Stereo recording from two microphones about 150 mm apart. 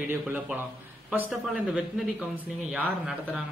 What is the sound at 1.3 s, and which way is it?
Speech, centre (ahead or behind).